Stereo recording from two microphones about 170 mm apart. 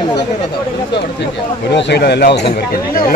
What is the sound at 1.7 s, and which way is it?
Speech, 85° left.